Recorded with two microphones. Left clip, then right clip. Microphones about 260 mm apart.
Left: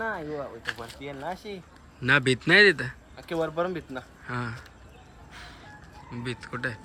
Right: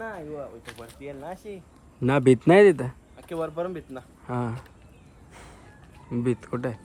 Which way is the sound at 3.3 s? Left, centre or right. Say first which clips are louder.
Left 2 dB; left.